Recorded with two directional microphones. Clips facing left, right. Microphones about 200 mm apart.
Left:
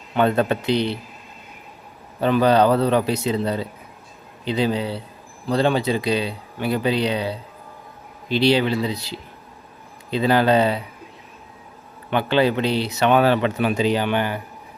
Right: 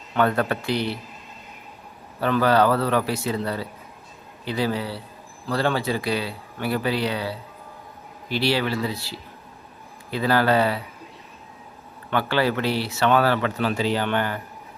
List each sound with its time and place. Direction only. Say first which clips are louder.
0.1 s speech: left 3 dB; 20° left (ahead or behind)
2.2 s speech: left 3 dB; 20° left (ahead or behind)
12.1 s speech: left 4 dB; 20° left (ahead or behind)